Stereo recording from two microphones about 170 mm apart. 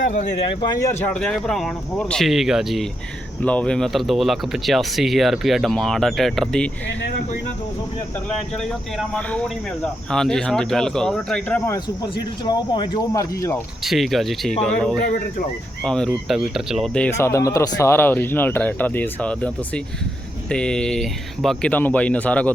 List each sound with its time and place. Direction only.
0.6 s speech: 20° left (ahead or behind); by 6.7 s 5° left (ahead or behind)
9.0 s speech: 5° left (ahead or behind)
12.0 s speech: 30° left (ahead or behind)
13.8 s speech: centre (ahead or behind)
17.2 s speech: 15° left (ahead or behind)